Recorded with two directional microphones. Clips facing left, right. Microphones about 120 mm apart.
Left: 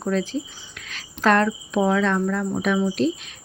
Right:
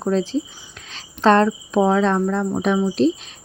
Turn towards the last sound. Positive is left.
turn(degrees=-30)  # may be behind; listen again after turning